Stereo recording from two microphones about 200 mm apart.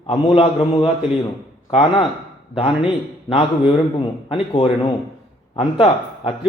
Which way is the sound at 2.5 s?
30° left (ahead or behind).